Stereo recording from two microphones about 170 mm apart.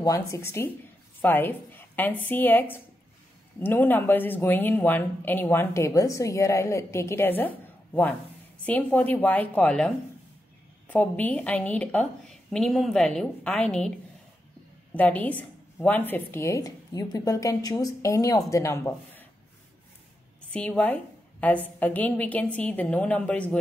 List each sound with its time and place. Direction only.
0.0 s a woman's voice: 20° left (ahead or behind)
15.0 s a woman's voice: 10° left (ahead or behind)
20.5 s a woman's voice: 10° left (ahead or behind)